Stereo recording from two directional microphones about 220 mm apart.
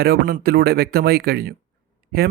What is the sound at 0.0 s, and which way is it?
A man's voice, 40° right (ahead or behind).